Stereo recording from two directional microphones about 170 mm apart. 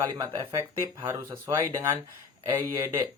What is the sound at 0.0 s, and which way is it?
Speech, 20° right (ahead or behind).